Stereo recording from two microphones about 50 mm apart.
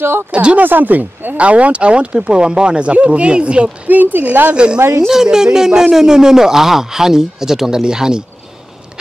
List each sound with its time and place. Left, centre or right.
0.3 s speech: right
0.6 s speech: right
3.9 s speech: right
4.5 s speech: centre